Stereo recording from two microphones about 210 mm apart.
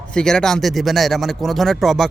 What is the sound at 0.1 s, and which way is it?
Speech, 5° left (ahead or behind).